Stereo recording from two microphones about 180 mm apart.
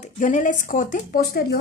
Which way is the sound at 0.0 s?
45° left (ahead or behind).